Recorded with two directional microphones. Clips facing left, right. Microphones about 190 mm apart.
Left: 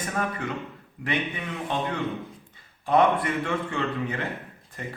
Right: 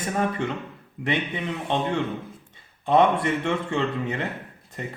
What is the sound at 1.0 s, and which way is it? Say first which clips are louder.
Speech: right 3 dB; 25° right (ahead or behind).